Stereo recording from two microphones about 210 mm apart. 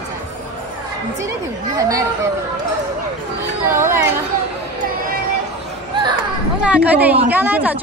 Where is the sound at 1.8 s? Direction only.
15° right (ahead or behind).